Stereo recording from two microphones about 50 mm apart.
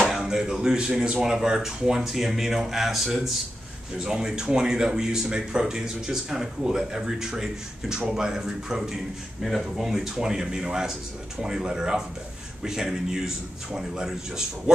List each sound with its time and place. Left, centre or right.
0.1 s speech: centre